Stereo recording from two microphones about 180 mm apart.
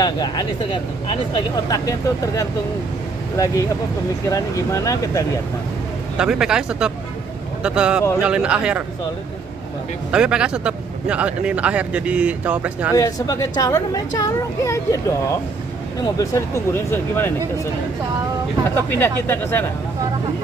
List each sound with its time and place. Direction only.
0.0 s speech: 25° left (ahead or behind)
1.7 s speech: 20° left (ahead or behind)
4.3 s speech: 15° left (ahead or behind)
6.1 s speech: 5° right (ahead or behind)
10.1 s speech: 5° right (ahead or behind)
12.9 s speech: 20° left (ahead or behind)
16.2 s speech: 15° left (ahead or behind)
18.8 s speech: 10° left (ahead or behind)